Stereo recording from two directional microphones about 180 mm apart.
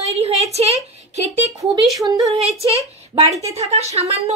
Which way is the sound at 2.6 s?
35° right (ahead or behind).